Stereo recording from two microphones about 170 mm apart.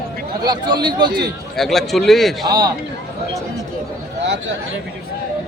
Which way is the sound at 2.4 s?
25° right (ahead or behind).